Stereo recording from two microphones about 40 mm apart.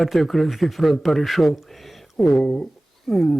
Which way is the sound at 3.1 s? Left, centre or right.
Centre.